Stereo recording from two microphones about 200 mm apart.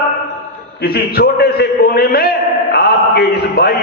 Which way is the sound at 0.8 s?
50° left (ahead or behind).